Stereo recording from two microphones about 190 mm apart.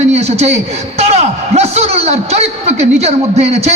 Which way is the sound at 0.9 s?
35° right (ahead or behind).